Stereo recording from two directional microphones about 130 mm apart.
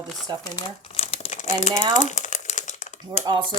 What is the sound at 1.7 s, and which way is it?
Speech, 35° right (ahead or behind).